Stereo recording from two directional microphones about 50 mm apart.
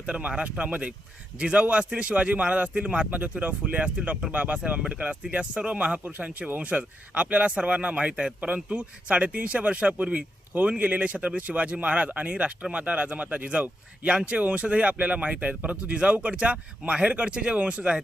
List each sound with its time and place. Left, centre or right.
0.0 s speech: right
3.1 s speech: right